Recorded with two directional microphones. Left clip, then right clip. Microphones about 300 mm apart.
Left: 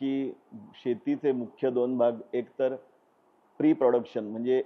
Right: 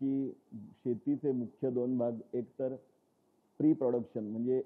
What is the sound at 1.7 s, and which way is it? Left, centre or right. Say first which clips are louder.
Speech: left 6 dB; left.